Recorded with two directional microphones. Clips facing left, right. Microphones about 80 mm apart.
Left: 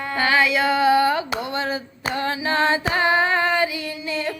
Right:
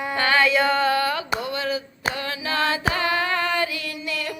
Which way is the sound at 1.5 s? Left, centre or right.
Left.